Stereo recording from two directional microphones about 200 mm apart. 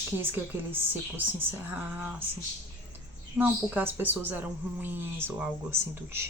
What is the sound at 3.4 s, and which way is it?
Speech, 10° right (ahead or behind).